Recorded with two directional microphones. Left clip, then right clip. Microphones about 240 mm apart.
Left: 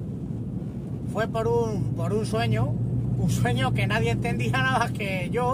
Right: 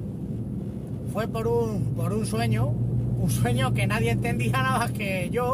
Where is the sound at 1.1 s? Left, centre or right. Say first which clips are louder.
Left 1 dB; centre.